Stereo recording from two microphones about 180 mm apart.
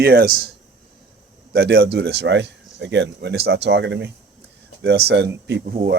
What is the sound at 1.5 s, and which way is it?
Speech, 65° right (ahead or behind).